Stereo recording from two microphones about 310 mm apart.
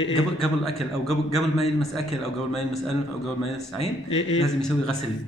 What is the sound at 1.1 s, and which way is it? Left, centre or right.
Speech, centre.